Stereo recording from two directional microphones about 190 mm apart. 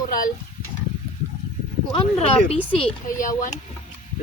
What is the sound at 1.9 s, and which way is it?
Speech, 30° left (ahead or behind).